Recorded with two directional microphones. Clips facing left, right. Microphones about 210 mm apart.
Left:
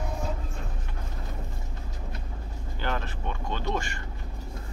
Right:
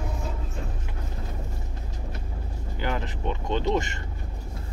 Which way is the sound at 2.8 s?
15° right (ahead or behind).